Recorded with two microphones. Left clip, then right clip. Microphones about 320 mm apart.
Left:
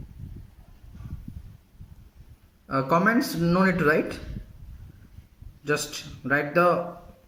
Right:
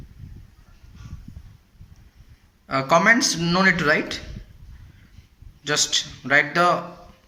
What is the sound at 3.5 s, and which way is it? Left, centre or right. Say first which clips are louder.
Speech: right 4 dB; right.